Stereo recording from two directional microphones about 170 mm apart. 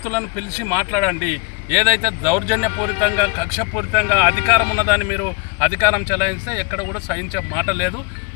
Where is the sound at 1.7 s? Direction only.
15° right (ahead or behind).